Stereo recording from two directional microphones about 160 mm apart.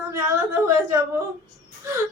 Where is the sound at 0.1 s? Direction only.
15° right (ahead or behind).